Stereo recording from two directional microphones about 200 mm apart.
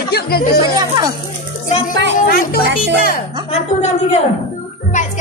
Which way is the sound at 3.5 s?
35° left (ahead or behind).